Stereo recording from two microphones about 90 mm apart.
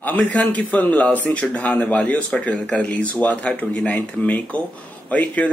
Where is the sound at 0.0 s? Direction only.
15° left (ahead or behind).